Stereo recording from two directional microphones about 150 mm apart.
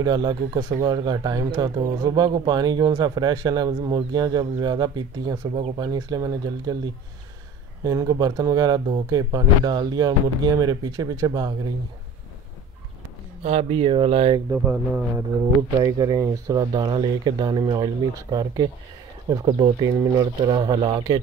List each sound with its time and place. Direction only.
0.0 s speech: 30° right (ahead or behind)
5.5 s speech: 40° right (ahead or behind)
5.9 s speech: 25° right (ahead or behind)
13.4 s speech: 45° right (ahead or behind)
14.5 s speech: 10° right (ahead or behind)
15.8 s speech: 25° right (ahead or behind)